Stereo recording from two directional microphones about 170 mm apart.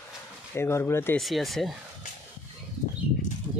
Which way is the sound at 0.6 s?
15° left (ahead or behind).